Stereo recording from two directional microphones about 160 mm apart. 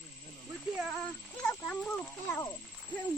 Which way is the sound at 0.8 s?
Centre (ahead or behind).